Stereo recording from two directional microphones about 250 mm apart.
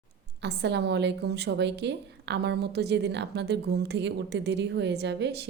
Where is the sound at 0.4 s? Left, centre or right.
Right.